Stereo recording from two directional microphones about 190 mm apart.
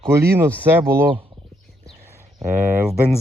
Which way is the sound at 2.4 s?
15° right (ahead or behind).